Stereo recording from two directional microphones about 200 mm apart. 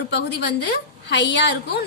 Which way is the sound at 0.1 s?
60° left (ahead or behind).